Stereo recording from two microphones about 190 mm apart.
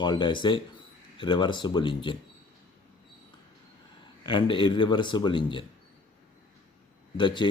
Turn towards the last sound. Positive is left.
turn(degrees=25)  # may be behind; listen again after turning